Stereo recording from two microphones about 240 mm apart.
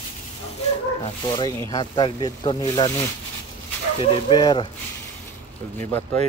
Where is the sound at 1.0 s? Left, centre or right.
Centre.